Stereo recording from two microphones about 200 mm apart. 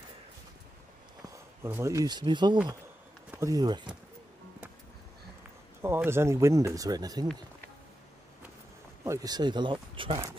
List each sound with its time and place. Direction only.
1.3 s speech: 15° right (ahead or behind)
5.8 s speech: 10° right (ahead or behind)
9.0 s speech: 15° right (ahead or behind)